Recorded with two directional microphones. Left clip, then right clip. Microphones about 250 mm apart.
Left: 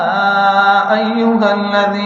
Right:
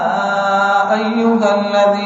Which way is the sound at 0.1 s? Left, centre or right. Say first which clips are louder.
Left 3 dB; left.